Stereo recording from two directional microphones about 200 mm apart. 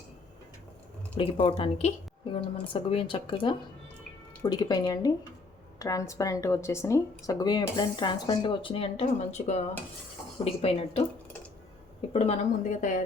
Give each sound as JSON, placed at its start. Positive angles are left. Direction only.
{"t": 1.1, "sound": "speech", "side_deg": 30}
{"t": 12.1, "sound": "speech", "side_deg": 35}